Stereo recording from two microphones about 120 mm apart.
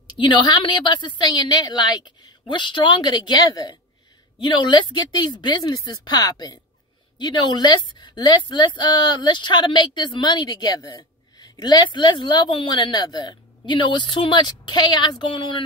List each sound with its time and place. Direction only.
0.2 s speech: 40° left (ahead or behind)